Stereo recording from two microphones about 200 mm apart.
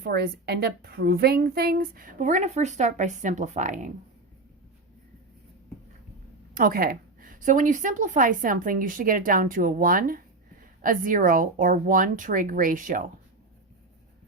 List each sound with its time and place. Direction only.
0.0 s a woman's voice: 50° right (ahead or behind)
6.5 s a woman's voice: 45° right (ahead or behind)